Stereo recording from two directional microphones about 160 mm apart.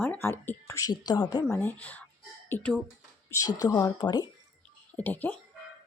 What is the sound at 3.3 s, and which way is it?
Speech, 20° left (ahead or behind).